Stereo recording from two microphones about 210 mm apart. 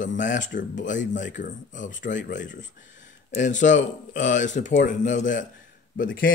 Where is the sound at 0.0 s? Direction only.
35° left (ahead or behind).